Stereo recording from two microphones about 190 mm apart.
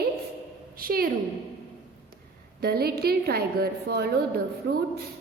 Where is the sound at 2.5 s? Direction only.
55° right (ahead or behind).